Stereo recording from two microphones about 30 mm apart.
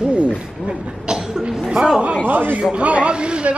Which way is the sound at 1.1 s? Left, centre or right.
Right.